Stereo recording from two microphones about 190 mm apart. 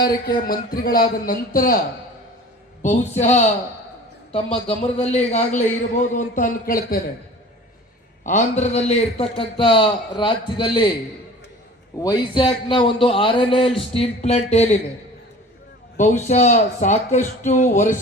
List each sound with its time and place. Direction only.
0.3 s a man's voice: 50° left (ahead or behind)
2.8 s speech: 40° left (ahead or behind)
4.9 s speech: 35° left (ahead or behind)
8.2 s a man's voice: 40° left (ahead or behind); by 10.8 s 25° left (ahead or behind)
11.9 s a man's voice: 20° left (ahead or behind)
16.0 s speech: 40° left (ahead or behind)